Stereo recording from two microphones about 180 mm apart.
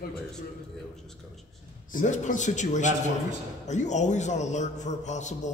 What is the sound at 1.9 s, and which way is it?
A man's voice, 45° left (ahead or behind).